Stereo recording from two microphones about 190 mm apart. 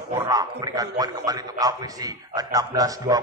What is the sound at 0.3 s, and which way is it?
A man's voice, 20° right (ahead or behind).